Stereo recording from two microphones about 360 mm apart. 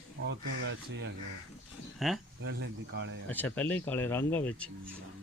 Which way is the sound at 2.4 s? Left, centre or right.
Right.